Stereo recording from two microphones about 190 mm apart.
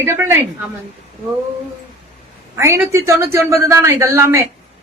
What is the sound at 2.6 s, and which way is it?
Speech, 15° right (ahead or behind).